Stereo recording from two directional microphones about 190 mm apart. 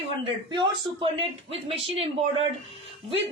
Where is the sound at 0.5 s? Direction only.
25° right (ahead or behind).